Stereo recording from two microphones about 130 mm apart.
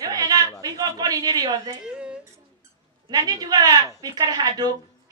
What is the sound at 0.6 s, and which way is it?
A man's voice, 30° right (ahead or behind).